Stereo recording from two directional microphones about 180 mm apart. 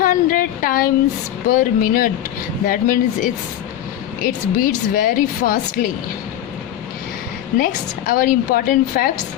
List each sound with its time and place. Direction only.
0.0 s a sound: 50° left (ahead or behind)
1.5 s speech: 50° left (ahead or behind)
7.6 s speech: 50° left (ahead or behind)